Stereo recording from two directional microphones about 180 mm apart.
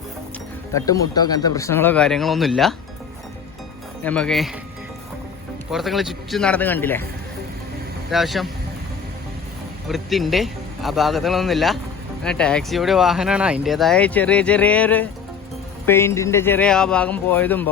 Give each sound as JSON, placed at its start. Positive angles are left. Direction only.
{"t": 0.7, "sound": "speech", "side_deg": 20}
{"t": 4.0, "sound": "speech", "side_deg": 5}
{"t": 5.7, "sound": "speech", "side_deg": 0}
{"t": 8.1, "sound": "speech", "side_deg": 0}
{"t": 9.9, "sound": "speech", "side_deg": 0}